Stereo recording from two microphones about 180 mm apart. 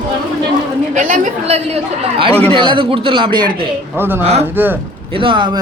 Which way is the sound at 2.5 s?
25° right (ahead or behind).